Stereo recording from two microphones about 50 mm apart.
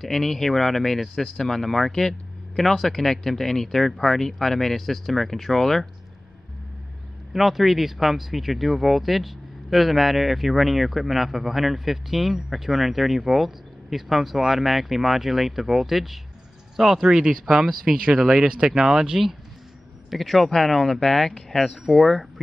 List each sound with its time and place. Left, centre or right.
0.0 s speech: centre
7.3 s speech: centre
17.9 s speech: right
20.1 s speech: centre